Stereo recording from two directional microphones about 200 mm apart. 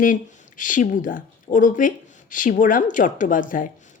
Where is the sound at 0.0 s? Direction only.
40° left (ahead or behind).